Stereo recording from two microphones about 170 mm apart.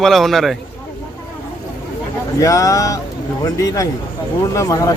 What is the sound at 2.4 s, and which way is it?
Speech, 20° left (ahead or behind).